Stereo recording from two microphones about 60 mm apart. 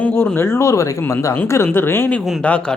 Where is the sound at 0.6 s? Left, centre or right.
Left.